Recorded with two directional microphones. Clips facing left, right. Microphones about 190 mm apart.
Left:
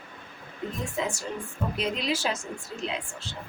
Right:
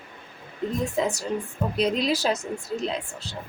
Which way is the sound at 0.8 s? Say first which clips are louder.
Right 4 dB; 35° right (ahead or behind).